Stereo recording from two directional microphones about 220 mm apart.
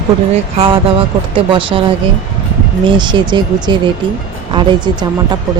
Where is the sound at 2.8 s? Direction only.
20° right (ahead or behind).